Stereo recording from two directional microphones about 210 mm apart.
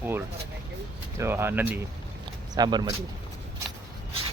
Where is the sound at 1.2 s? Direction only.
10° right (ahead or behind).